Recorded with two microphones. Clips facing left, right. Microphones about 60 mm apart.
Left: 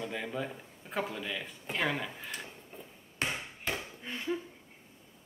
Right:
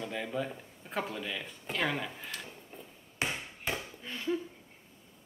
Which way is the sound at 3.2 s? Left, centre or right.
Centre.